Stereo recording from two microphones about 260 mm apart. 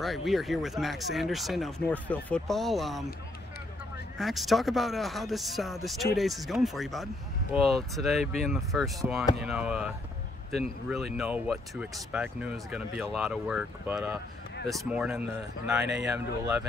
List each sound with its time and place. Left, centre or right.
0.0 s speech: centre
4.2 s speech: centre
15.8 s speech: right